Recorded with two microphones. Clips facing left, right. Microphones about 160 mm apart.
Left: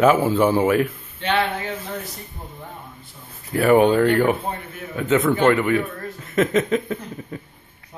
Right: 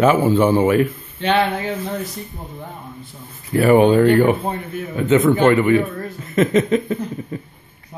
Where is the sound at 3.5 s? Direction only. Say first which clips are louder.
Right 3 dB; centre (ahead or behind).